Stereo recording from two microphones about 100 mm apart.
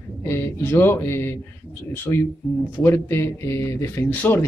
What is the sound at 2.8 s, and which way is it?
Speech, 25° left (ahead or behind).